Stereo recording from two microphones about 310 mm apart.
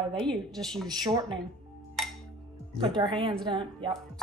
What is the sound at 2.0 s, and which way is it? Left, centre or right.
Music, centre.